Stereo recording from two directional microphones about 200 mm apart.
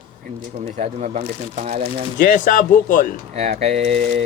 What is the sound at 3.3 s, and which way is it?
Speech, 30° right (ahead or behind).